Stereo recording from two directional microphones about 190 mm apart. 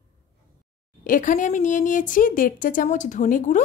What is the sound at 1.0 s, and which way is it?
A woman's voice, 45° left (ahead or behind).